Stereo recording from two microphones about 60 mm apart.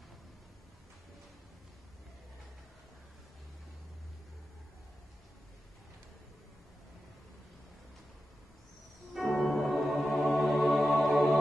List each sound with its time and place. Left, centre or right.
9.1 s organ: centre